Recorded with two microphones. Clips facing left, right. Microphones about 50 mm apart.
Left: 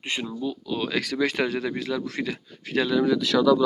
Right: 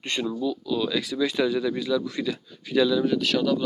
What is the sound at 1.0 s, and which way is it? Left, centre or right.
Speech, left.